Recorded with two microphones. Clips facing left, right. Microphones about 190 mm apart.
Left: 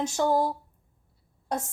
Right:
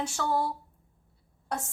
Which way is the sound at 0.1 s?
20° left (ahead or behind).